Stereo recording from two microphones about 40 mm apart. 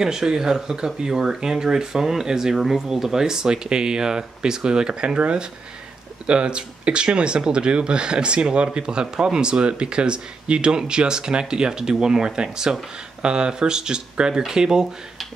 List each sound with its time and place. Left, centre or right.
0.0 s speech: centre